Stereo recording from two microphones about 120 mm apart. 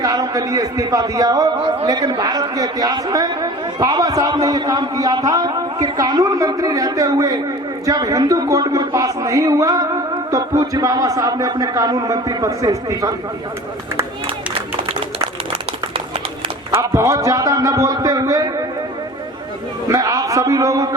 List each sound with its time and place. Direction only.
0.0 s a man's voice: 30° right (ahead or behind)
16.9 s a man's voice: 25° right (ahead or behind)
19.9 s a man's voice: 30° right (ahead or behind)